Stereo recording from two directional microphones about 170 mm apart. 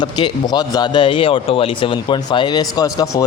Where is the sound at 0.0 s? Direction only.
25° left (ahead or behind).